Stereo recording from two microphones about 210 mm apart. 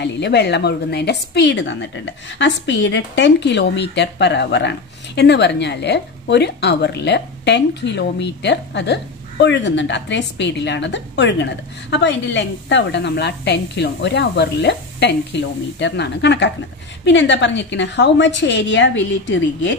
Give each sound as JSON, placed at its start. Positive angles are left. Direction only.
{"t": 0.0, "sound": "a woman's voice", "side_deg": 55}